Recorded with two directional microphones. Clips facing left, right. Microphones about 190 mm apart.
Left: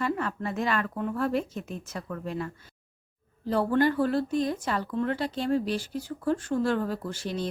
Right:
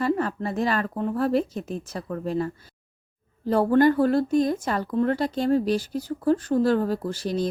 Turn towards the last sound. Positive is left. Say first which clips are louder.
# right 6 dB
turn(degrees=-40)  # may be behind; listen again after turning